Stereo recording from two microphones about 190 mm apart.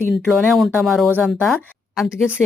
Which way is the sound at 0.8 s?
Centre (ahead or behind).